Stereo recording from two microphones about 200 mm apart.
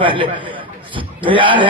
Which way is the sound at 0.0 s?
25° right (ahead or behind).